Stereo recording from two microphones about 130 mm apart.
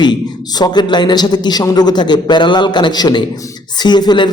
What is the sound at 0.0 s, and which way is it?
A man's voice, 35° left (ahead or behind).